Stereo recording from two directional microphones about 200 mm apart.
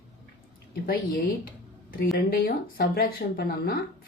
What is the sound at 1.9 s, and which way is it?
Speech, 50° left (ahead or behind).